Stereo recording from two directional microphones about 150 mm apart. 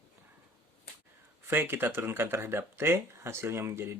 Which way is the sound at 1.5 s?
15° right (ahead or behind).